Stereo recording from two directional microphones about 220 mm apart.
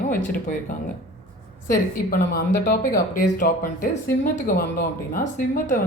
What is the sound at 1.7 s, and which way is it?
A woman's voice, 40° left (ahead or behind).